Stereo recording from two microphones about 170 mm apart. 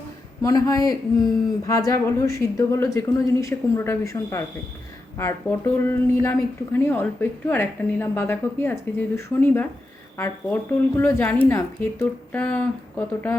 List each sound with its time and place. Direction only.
0.4 s a woman's voice: 20° left (ahead or behind)